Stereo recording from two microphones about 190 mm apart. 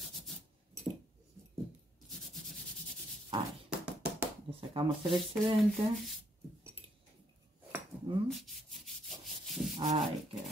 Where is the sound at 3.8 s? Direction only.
5° right (ahead or behind).